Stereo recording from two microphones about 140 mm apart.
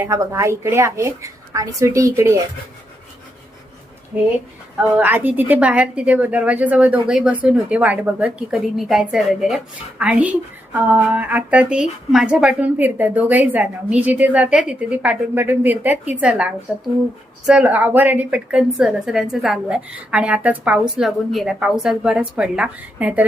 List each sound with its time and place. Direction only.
0.0 s speech: 20° right (ahead or behind)
4.1 s a woman's voice: 10° right (ahead or behind)